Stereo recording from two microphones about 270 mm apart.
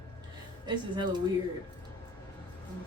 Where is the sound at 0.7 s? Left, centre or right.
Centre.